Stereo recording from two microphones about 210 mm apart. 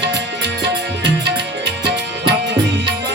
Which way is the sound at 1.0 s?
55° right (ahead or behind).